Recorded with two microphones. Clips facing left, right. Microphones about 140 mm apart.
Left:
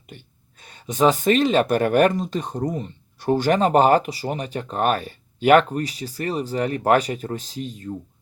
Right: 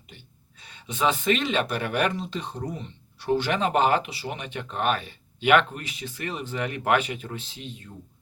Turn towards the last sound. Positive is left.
turn(degrees=40)  # may be behind; listen again after turning